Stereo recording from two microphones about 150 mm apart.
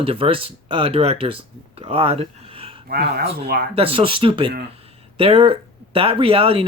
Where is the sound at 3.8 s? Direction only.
40° right (ahead or behind).